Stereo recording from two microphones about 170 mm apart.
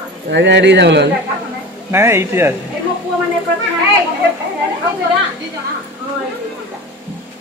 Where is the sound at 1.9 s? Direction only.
15° right (ahead or behind).